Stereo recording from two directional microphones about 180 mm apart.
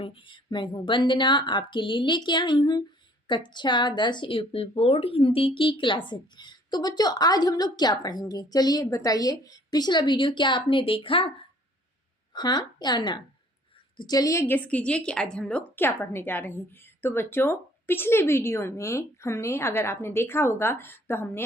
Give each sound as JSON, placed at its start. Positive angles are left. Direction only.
{"t": 0.0, "sound": "speech", "side_deg": 30}
{"t": 12.3, "sound": "a woman's voice", "side_deg": 25}